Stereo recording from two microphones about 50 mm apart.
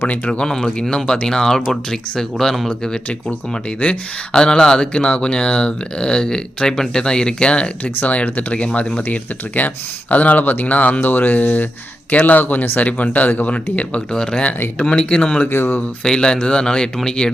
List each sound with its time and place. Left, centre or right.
0.1 s speech: left
0.4 s speech: centre; by 14.0 s left
14.1 s speech: centre
15.4 s speech: left
16.0 s speech: centre